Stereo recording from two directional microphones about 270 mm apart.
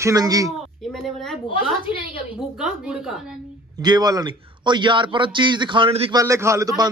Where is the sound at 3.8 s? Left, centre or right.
Centre.